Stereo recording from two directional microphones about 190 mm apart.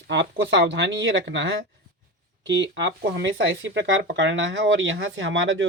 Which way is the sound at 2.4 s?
70° right (ahead or behind).